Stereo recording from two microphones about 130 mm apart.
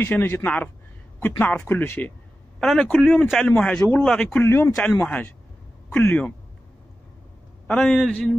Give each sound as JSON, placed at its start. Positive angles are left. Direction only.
{"t": 0.0, "sound": "speech", "side_deg": 15}
{"t": 7.6, "sound": "speech", "side_deg": 5}